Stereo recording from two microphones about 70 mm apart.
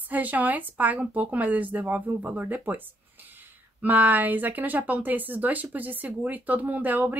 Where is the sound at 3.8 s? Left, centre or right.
Right.